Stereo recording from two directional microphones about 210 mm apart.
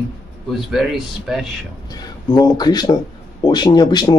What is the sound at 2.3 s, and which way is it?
A man's voice, 20° left (ahead or behind).